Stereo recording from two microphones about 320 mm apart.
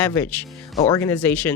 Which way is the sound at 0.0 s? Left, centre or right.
Centre.